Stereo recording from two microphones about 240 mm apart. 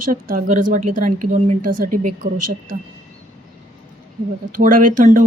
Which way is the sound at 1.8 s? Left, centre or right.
Right.